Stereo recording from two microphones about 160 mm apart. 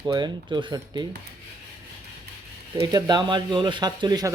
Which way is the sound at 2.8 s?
25° right (ahead or behind).